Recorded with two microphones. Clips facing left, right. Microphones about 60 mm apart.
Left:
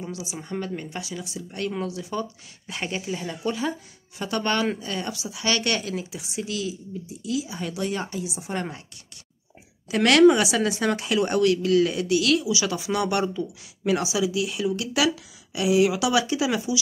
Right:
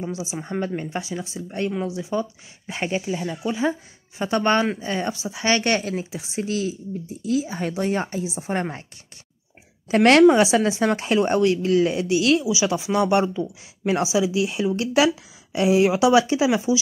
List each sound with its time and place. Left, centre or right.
0.0 s speech: right; by 3.5 s centre
4.2 s speech: right
9.8 s speech: right